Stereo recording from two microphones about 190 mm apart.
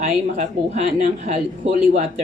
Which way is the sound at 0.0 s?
35° right (ahead or behind).